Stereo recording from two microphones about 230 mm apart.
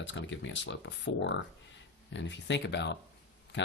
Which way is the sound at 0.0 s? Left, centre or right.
Left.